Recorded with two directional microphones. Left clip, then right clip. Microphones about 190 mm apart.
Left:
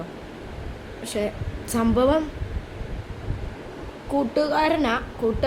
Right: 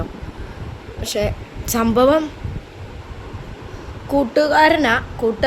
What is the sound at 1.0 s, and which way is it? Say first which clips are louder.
Speech: right 6 dB; 20° right (ahead or behind).